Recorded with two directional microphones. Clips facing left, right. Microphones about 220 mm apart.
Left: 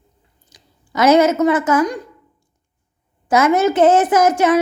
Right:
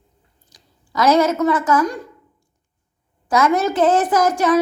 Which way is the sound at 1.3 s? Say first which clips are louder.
Left 2 dB; 25° left (ahead or behind).